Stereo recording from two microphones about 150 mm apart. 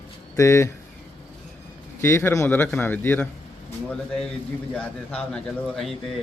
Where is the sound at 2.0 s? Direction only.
15° left (ahead or behind).